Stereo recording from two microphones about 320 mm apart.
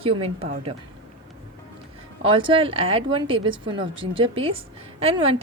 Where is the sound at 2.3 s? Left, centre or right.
Centre.